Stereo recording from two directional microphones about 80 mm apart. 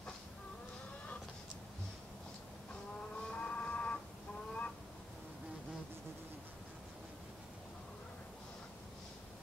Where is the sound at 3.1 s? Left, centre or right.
Centre.